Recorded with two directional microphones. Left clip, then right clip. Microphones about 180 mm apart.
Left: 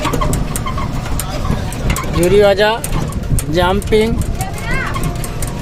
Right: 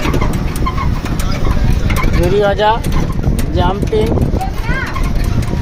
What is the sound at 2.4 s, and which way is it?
Speech, 35° left (ahead or behind).